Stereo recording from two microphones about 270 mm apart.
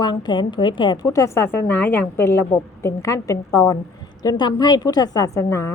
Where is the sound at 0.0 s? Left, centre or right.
Centre.